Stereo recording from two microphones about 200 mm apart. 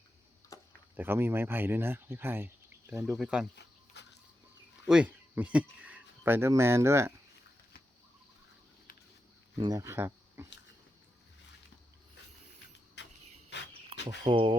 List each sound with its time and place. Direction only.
0.5 s a sound: 15° left (ahead or behind)
0.9 s speech: 10° right (ahead or behind)
3.5 s a sound: 60° left (ahead or behind)
4.9 s speech: 5° right (ahead or behind)
9.6 s speech: 15° right (ahead or behind)
13.0 s vehicle: 60° left (ahead or behind)
13.5 s dog: 60° left (ahead or behind)
14.3 s speech: 25° right (ahead or behind)